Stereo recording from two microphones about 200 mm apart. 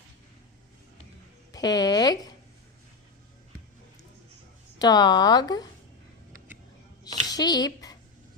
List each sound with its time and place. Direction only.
1.5 s speech: 20° left (ahead or behind)
4.8 s speech: 20° left (ahead or behind)
7.3 s a sound: 20° left (ahead or behind)